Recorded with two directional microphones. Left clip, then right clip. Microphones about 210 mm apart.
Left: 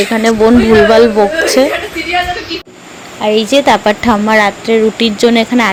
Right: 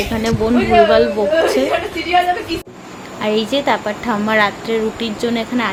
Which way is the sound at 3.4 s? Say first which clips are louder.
Left 8 dB; 30° left (ahead or behind).